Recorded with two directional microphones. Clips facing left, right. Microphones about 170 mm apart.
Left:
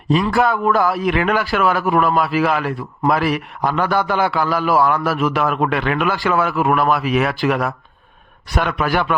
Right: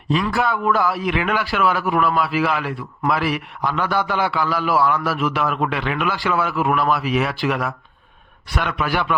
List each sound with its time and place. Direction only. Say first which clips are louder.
0.1 s a man's voice: left 4 dB; 45° left (ahead or behind)